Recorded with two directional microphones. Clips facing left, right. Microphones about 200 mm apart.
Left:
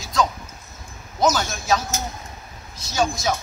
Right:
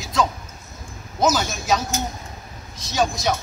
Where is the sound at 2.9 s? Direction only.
Centre (ahead or behind).